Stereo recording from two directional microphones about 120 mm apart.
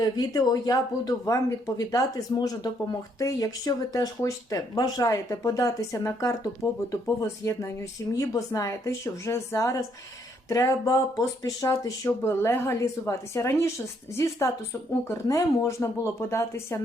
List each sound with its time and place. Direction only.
0.0 s speech: 30° left (ahead or behind)